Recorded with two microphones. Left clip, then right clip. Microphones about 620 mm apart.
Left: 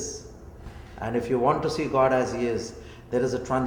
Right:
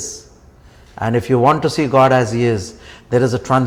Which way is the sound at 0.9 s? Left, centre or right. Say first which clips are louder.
Right 10 dB; right.